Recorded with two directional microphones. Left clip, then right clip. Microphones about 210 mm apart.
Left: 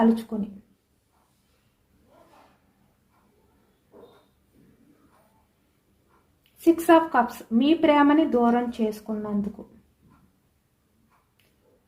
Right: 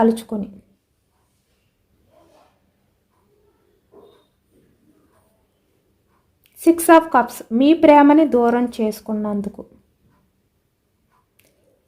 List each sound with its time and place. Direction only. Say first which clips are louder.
0.0 s a woman's voice: right 6 dB; 50° right (ahead or behind)
6.6 s a woman's voice: right 6 dB; 50° right (ahead or behind)